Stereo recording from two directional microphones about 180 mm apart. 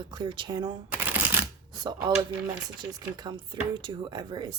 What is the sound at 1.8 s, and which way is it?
Speech, 25° right (ahead or behind).